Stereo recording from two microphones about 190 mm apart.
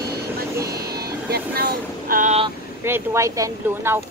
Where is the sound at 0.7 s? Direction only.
55° right (ahead or behind).